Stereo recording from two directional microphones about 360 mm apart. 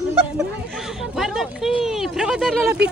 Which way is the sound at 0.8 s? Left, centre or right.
Centre.